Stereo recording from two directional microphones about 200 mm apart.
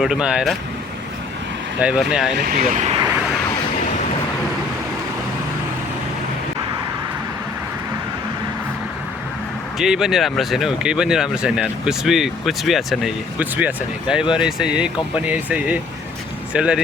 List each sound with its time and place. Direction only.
0.0 s speech: 5° right (ahead or behind)
1.8 s speech: 5° right (ahead or behind)
2.4 s speech: 45° right (ahead or behind)
9.7 s speech: centre (ahead or behind)